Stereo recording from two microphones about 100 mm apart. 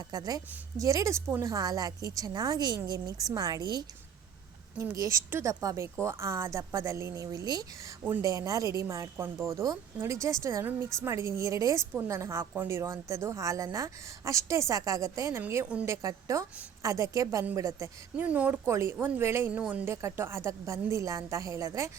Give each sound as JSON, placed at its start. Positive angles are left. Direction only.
{"t": 0.1, "sound": "a woman's voice", "side_deg": -40}
{"t": 4.8, "sound": "a woman's voice", "side_deg": -30}
{"t": 15.4, "sound": "a woman's voice", "side_deg": -25}
{"t": 15.9, "sound": "a woman's voice", "side_deg": -35}
{"t": 18.2, "sound": "speech", "side_deg": -15}
{"t": 18.6, "sound": "a woman's voice", "side_deg": -30}
{"t": 19.5, "sound": "speech", "side_deg": -15}
{"t": 19.9, "sound": "a woman's voice", "side_deg": -30}